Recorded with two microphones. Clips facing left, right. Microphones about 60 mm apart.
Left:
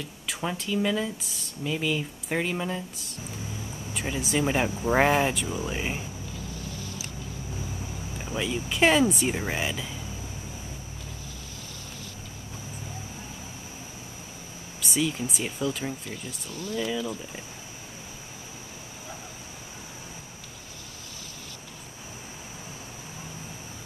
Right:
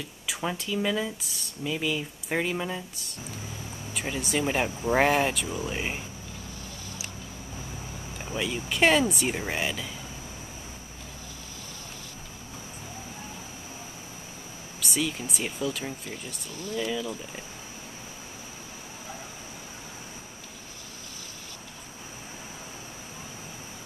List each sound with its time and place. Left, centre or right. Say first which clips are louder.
0.3 s speech: left 1 dB; centre
8.3 s speech: left 1 dB; centre
14.8 s speech: left 2 dB; centre